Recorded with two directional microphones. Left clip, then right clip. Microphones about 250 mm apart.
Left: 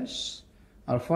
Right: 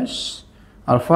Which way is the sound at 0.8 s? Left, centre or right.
Right.